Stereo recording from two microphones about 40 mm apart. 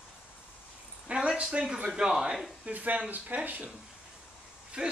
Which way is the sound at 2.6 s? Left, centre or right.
Right.